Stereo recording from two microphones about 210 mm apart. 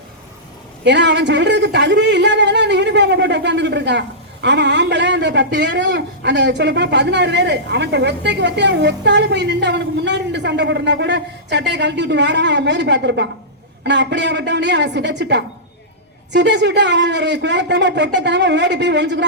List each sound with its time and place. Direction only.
0.9 s a man's voice: 55° right (ahead or behind)